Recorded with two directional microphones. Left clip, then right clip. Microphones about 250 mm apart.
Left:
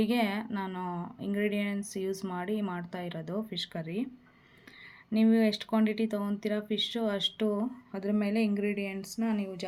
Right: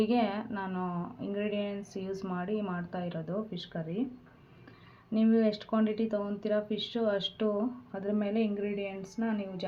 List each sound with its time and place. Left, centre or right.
0.0 s speech: left
5.1 s speech: left